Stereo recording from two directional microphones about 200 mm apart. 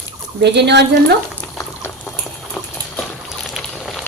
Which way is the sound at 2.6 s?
Centre (ahead or behind).